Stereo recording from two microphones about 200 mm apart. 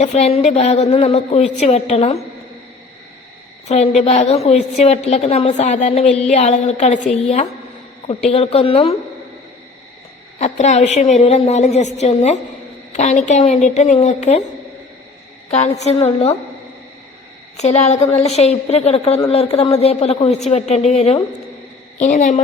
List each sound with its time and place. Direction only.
0.0 s a woman's voice: 35° left (ahead or behind)
3.7 s a woman's voice: 35° left (ahead or behind)
10.3 s a woman's voice: 35° left (ahead or behind)
15.4 s a woman's voice: 35° left (ahead or behind)
17.6 s a woman's voice: 35° left (ahead or behind)